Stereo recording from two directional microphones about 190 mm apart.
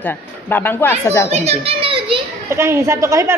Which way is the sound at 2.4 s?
15° right (ahead or behind).